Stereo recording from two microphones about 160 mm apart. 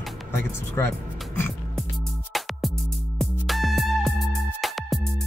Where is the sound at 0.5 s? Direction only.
15° left (ahead or behind).